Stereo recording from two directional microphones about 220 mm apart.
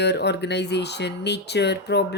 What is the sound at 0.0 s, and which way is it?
Speech, 50° left (ahead or behind).